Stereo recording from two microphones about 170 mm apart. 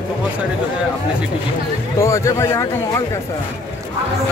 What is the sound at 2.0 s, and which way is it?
Speech, 15° left (ahead or behind).